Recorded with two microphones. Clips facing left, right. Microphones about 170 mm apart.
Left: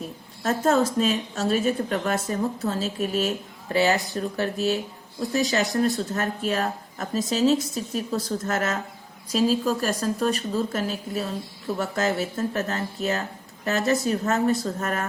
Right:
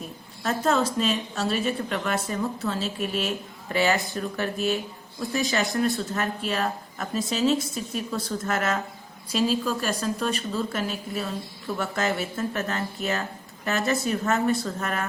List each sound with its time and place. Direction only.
0.4 s speech: 45° left (ahead or behind)